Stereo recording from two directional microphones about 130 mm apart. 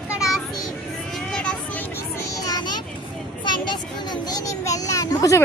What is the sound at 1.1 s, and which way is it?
Vehicle, 5° left (ahead or behind).